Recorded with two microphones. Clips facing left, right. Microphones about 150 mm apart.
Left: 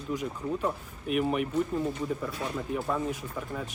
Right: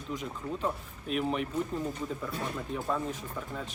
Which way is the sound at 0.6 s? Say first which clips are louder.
Left 2 dB; 5° left (ahead or behind).